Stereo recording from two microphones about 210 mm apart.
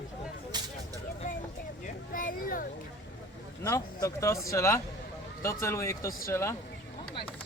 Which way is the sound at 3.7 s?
15° left (ahead or behind).